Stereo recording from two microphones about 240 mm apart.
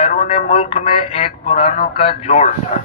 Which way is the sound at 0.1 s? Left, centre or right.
Left.